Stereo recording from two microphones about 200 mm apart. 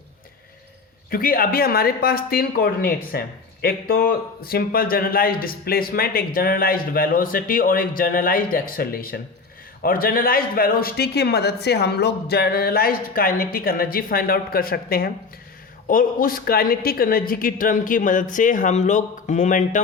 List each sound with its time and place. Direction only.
1.1 s speech: 45° left (ahead or behind)